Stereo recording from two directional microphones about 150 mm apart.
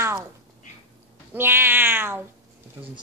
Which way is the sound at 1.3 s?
15° right (ahead or behind).